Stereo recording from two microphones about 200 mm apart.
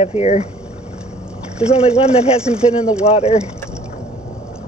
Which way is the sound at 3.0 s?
30° left (ahead or behind).